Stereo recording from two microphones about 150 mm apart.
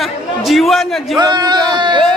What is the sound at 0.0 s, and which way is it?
A man's voice, centre (ahead or behind).